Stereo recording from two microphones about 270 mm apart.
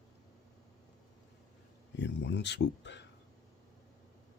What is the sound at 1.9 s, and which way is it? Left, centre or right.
Speech, left.